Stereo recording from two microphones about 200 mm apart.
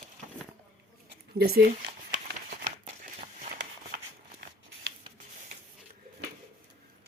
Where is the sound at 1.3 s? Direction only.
50° right (ahead or behind).